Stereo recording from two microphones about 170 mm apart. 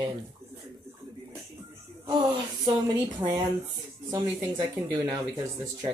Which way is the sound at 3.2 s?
25° right (ahead or behind).